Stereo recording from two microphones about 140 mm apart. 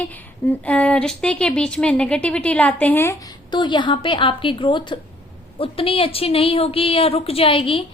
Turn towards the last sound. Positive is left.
turn(degrees=40)  # may be behind; listen again after turning